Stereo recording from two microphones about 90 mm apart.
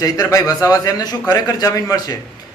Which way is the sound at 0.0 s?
40° left (ahead or behind).